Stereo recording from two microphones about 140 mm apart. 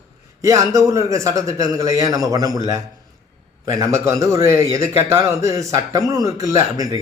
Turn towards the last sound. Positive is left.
turn(degrees=-25)  # may be behind; listen again after turning